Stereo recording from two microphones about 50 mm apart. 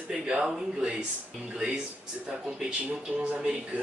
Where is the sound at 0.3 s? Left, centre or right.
Centre.